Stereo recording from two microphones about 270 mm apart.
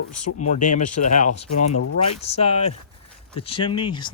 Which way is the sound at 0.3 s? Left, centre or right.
Left.